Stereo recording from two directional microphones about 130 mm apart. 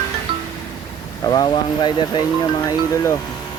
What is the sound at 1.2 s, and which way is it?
Speech, 30° left (ahead or behind).